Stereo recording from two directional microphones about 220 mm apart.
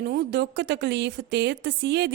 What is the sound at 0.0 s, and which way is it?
Speech, 45° right (ahead or behind).